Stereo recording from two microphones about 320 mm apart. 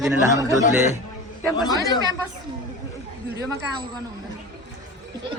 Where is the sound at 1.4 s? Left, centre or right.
Centre.